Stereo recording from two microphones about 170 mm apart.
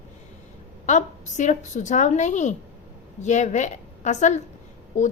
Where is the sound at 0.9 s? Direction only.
45° left (ahead or behind).